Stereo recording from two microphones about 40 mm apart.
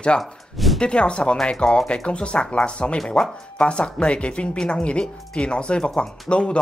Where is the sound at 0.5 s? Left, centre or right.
Centre.